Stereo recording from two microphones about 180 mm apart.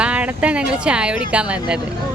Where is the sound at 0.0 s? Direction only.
5° right (ahead or behind).